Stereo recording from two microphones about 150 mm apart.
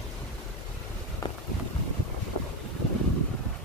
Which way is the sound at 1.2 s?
30° left (ahead or behind).